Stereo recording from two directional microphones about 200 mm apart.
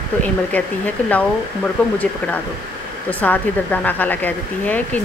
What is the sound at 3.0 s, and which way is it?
Speech, 10° left (ahead or behind).